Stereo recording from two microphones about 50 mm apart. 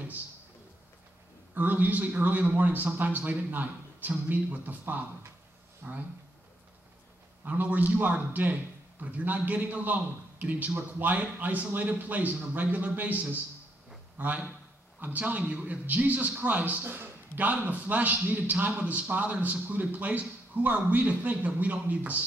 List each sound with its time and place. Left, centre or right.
1.5 s a man's voice: right
5.8 s speech: right
7.4 s a man's voice: right
16.8 s a man's voice: right
17.4 s a man's voice: right